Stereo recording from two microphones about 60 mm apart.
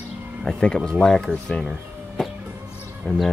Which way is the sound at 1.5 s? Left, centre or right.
Centre.